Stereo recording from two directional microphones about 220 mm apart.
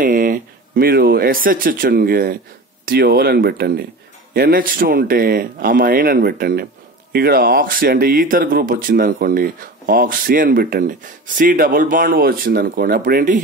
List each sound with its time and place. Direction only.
0.0 s speech: 40° right (ahead or behind)